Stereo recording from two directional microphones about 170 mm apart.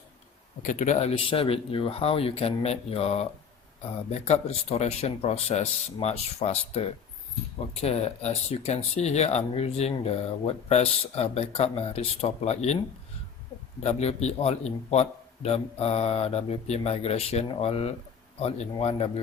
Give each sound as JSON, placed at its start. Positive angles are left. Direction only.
{"t": 0.6, "sound": "speech", "side_deg": 50}
{"t": 13.8, "sound": "speech", "side_deg": 40}